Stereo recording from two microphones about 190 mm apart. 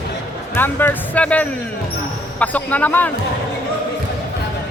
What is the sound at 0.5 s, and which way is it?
Speech, 10° left (ahead or behind).